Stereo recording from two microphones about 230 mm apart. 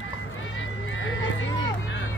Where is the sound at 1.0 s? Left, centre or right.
Left.